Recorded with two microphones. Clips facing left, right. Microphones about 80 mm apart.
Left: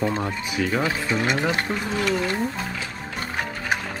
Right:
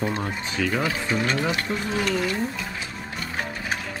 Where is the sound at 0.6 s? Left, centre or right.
Centre.